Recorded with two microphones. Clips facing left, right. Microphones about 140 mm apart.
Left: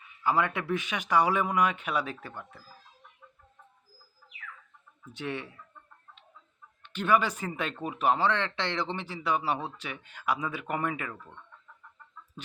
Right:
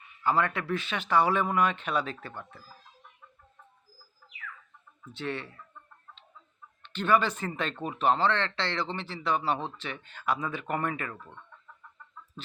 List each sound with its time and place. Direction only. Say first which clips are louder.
0.2 s speech: even; 10° left (ahead or behind)
5.1 s speech: right 1 dB; 15° left (ahead or behind)
6.8 s speech: even; 10° left (ahead or behind)